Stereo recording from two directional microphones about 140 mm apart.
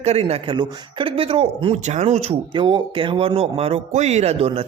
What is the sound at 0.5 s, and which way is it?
Speech, 35° right (ahead or behind).